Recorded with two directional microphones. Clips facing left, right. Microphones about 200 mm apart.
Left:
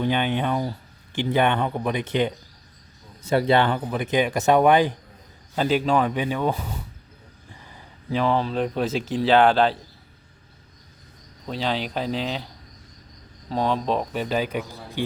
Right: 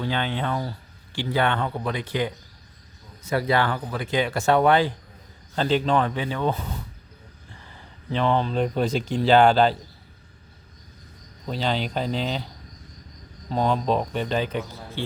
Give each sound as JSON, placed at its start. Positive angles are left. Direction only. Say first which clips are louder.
{"t": 0.0, "sound": "speech", "louder": "left 4 dB", "side_deg": 15}
{"t": 7.5, "sound": "a sound", "louder": "left 1 dB", "side_deg": 15}
{"t": 8.2, "sound": "speech", "louder": "even", "side_deg": 5}
{"t": 11.4, "sound": "speech", "louder": "even", "side_deg": 0}
{"t": 13.5, "sound": "speech", "louder": "right 1 dB", "side_deg": 0}